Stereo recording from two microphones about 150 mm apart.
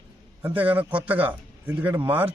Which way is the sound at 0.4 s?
10° right (ahead or behind).